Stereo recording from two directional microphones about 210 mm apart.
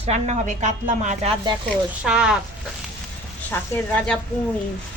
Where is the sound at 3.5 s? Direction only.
10° left (ahead or behind).